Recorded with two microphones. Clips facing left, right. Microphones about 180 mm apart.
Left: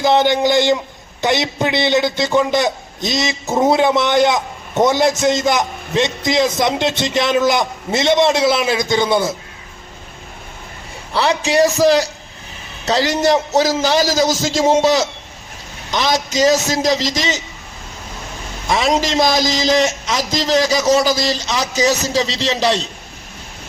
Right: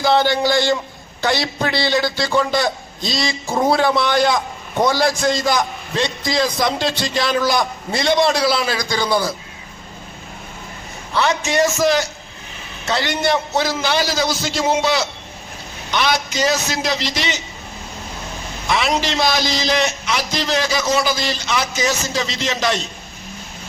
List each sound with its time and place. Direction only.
0.0 s a man's voice: 20° left (ahead or behind)
11.1 s a man's voice: 35° left (ahead or behind)
18.7 s a man's voice: 40° left (ahead or behind)